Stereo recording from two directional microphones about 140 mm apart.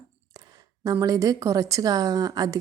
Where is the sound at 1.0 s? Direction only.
25° right (ahead or behind).